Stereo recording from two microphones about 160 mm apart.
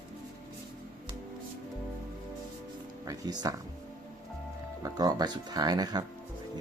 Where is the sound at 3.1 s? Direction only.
25° right (ahead or behind).